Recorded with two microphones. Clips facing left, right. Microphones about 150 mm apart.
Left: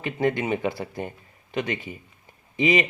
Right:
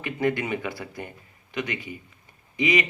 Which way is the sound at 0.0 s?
25° left (ahead or behind).